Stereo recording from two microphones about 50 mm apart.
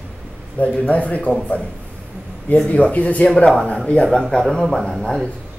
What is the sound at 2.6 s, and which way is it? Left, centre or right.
Speech, left.